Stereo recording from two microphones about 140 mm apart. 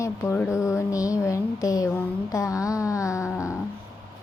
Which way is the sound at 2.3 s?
25° left (ahead or behind).